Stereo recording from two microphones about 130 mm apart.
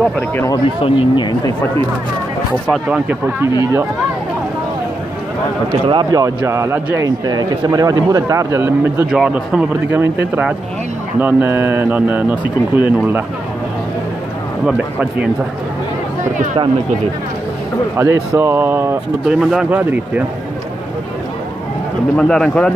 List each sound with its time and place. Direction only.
0.8 s speech: 40° left (ahead or behind)
2.9 s speech: 10° right (ahead or behind)
5.9 s speech: 35° right (ahead or behind)
6.2 s speech: 20° right (ahead or behind)
7.1 s speech: 30° right (ahead or behind)
9.1 s speech: 5° right (ahead or behind)
14.7 s speech: 10° right (ahead or behind)
17.9 s speech: 20° right (ahead or behind)
19.2 s speech: 5° right (ahead or behind)
22.1 s speech: 5° left (ahead or behind)